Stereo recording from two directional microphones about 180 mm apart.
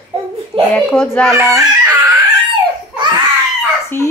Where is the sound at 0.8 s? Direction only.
10° left (ahead or behind).